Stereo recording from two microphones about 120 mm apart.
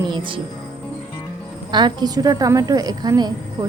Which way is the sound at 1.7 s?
40° right (ahead or behind).